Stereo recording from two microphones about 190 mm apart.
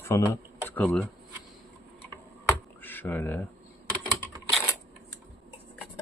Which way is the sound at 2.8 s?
10° left (ahead or behind).